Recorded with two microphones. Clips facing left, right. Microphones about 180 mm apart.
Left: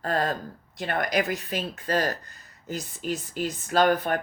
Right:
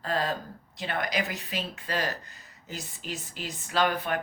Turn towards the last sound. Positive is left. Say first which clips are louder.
# left 5 dB
turn(degrees=45)  # may be behind; listen again after turning